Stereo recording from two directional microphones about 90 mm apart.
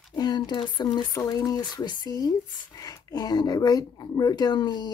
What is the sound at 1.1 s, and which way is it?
Speech, 45° left (ahead or behind).